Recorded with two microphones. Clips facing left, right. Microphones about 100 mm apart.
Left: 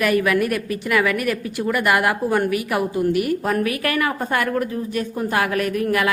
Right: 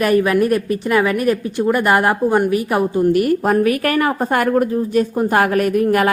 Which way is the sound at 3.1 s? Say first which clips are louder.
Right 5 dB; 45° right (ahead or behind).